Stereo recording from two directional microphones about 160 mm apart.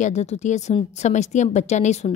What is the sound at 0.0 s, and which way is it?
A woman's voice, 45° left (ahead or behind).